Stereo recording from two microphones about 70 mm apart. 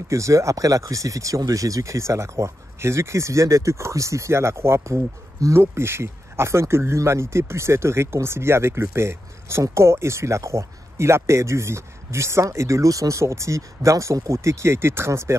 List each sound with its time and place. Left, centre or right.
0.1 s speech: right